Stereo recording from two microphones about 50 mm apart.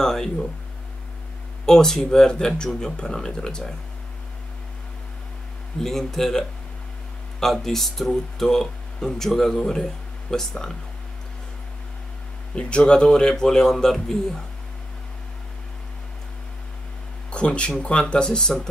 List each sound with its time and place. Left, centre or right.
0.0 s speech: centre
1.7 s speech: centre
5.8 s speech: centre
12.5 s speech: left
17.3 s speech: left